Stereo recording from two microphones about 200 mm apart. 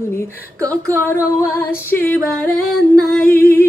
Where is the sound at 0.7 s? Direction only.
10° left (ahead or behind).